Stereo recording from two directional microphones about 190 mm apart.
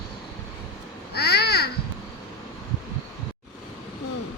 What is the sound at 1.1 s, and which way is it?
Babbling, 60° left (ahead or behind).